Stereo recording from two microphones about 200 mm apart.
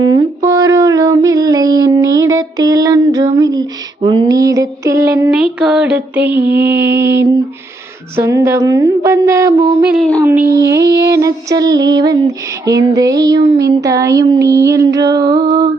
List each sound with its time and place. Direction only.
0.0 s music: 20° right (ahead or behind)
6.5 s mantra: 10° right (ahead or behind)
8.1 s a sound: 10° right (ahead or behind)